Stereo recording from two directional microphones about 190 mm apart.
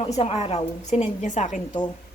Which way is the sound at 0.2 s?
30° left (ahead or behind).